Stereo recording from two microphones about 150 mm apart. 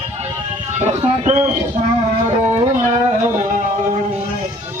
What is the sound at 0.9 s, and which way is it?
Speech, 50° right (ahead or behind).